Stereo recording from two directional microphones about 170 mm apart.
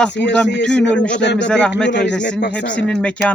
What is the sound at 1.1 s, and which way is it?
A man's voice, 90° left.